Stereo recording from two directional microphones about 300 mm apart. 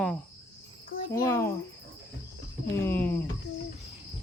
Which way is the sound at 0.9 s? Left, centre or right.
Left.